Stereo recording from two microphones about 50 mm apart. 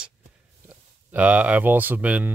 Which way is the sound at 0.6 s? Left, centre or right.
Right.